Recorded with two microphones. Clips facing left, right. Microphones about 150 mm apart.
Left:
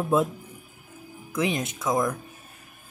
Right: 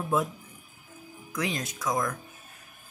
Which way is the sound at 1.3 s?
20° left (ahead or behind).